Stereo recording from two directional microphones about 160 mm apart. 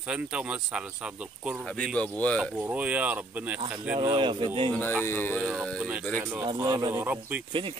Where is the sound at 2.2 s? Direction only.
5° left (ahead or behind).